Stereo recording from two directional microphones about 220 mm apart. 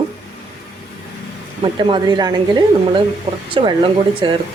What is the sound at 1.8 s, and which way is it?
Speech, 20° right (ahead or behind).